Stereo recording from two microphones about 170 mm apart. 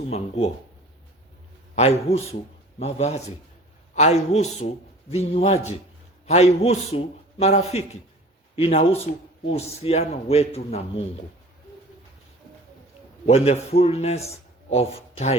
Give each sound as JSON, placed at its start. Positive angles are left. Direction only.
{"t": 0.0, "sound": "a man's voice", "side_deg": 35}
{"t": 1.7, "sound": "a man's voice", "side_deg": 40}
{"t": 13.2, "sound": "a man's voice", "side_deg": 40}